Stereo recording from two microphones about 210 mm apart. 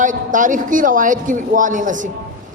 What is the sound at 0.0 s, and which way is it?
A man's voice, 40° right (ahead or behind).